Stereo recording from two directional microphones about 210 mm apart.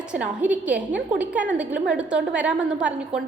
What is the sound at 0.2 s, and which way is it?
A woman's voice, 5° right (ahead or behind).